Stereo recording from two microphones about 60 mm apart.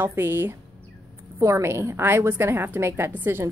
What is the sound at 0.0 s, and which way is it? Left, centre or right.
Speech, right.